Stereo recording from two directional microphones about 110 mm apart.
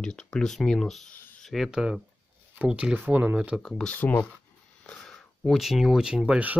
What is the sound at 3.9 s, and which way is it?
Speech, 15° left (ahead or behind).